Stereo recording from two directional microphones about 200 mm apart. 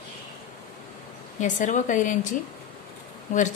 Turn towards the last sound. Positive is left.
turn(degrees=40)  # may be behind; listen again after turning